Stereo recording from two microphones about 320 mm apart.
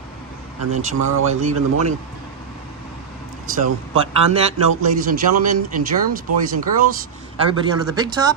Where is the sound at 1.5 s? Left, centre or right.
Right.